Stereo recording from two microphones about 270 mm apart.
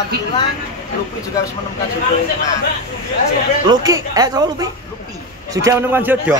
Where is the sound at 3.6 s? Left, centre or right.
Centre.